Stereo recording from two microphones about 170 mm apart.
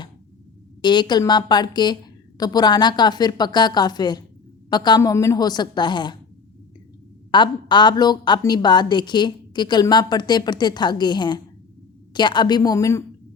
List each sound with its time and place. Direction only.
0.8 s a woman's voice: 25° left (ahead or behind)
7.3 s a woman's voice: 25° left (ahead or behind)